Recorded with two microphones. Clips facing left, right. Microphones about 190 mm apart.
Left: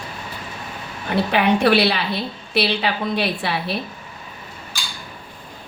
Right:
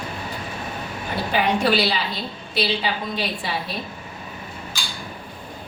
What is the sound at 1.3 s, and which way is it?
A woman's voice, 65° left (ahead or behind).